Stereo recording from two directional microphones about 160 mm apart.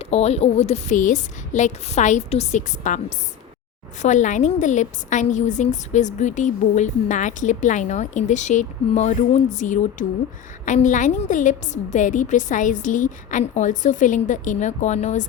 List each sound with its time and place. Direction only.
0.0 s a woman's voice: 40° left (ahead or behind)
4.0 s a woman's voice: 50° left (ahead or behind)